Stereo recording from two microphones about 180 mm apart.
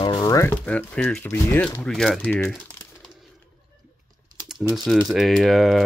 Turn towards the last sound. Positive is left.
turn(degrees=0)  # may be behind; listen again after turning